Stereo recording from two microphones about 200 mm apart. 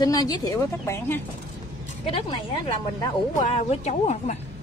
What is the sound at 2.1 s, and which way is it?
Speech, 25° left (ahead or behind).